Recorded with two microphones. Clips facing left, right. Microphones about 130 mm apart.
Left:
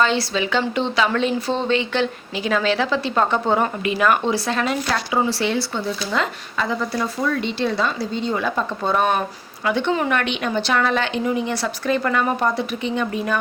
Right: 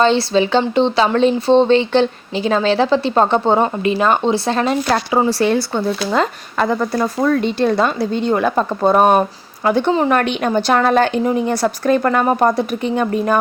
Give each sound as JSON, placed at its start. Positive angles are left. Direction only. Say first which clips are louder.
{"t": 0.0, "sound": "a woman's voice", "louder": "right 6 dB", "side_deg": -30}